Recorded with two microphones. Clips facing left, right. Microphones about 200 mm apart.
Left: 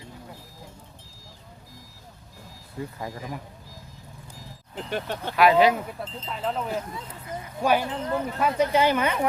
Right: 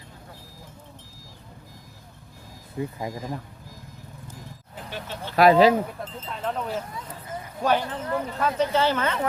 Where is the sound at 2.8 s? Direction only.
15° right (ahead or behind).